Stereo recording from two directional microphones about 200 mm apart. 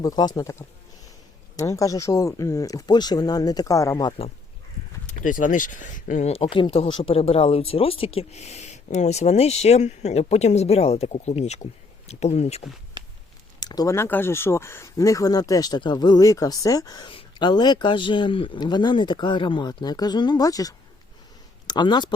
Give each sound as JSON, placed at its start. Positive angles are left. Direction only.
{"t": 0.0, "sound": "speech", "side_deg": 20}
{"t": 1.5, "sound": "speech", "side_deg": 15}
{"t": 5.2, "sound": "speech", "side_deg": 40}
{"t": 13.6, "sound": "speech", "side_deg": 20}